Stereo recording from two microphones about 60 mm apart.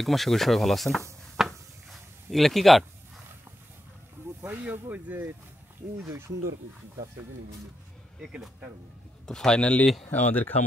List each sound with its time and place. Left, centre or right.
0.0 s speech: centre
1.3 s a sound: centre
4.4 s speech: right
8.2 s speech: centre
9.2 s speech: centre; by 10.5 s left